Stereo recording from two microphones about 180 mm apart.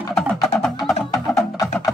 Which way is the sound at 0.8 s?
Centre (ahead or behind).